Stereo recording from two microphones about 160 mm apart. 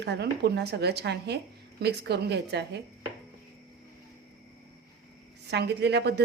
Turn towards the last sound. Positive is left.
turn(degrees=-90)